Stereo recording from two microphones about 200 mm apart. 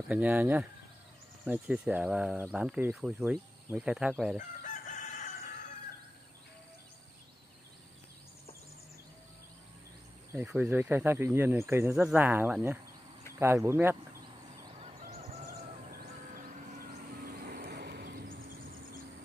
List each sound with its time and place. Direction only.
0.1 s speech: 10° right (ahead or behind)
4.4 s chicken: 40° left (ahead or behind)
10.3 s speech: 5° right (ahead or behind)
15.4 s fowl: 50° right (ahead or behind)
16.8 s vehicle: 45° right (ahead or behind)